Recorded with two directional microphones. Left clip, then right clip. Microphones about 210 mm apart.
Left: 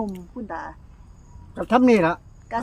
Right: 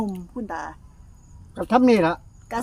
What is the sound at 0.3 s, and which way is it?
Speech, 55° right (ahead or behind).